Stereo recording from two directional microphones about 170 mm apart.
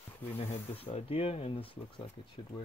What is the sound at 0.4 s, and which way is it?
Speech, 40° left (ahead or behind).